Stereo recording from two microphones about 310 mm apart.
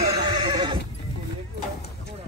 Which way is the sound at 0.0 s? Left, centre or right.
Centre.